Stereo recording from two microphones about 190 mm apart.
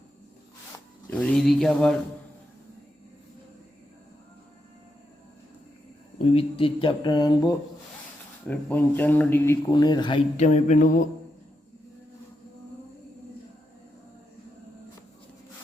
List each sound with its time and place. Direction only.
1.1 s speech: 5° left (ahead or behind)
6.3 s speech: 30° left (ahead or behind)
8.4 s speech: 10° left (ahead or behind)
9.7 s speech: 25° left (ahead or behind)
10.3 s a sound: 40° left (ahead or behind)